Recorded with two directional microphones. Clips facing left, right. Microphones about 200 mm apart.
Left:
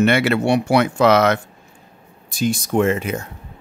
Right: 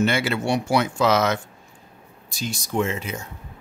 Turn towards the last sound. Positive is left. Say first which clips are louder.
# left 7 dB
turn(degrees=55)  # may be behind; listen again after turning